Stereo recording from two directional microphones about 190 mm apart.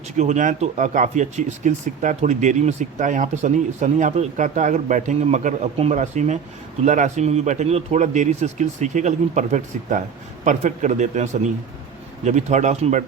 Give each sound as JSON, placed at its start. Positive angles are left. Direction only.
{"t": 0.2, "sound": "speech", "side_deg": -40}